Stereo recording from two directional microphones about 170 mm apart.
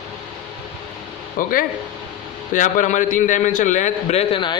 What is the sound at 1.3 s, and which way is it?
A man's voice, 55° left (ahead or behind).